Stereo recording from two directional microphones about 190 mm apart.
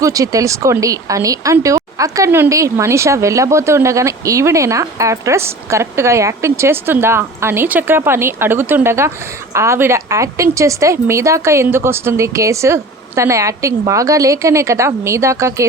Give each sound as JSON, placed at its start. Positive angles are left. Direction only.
{"t": 0.0, "sound": "speech", "side_deg": -20}